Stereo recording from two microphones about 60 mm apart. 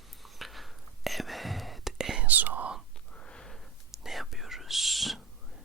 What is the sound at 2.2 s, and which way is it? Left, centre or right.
Whispering, right.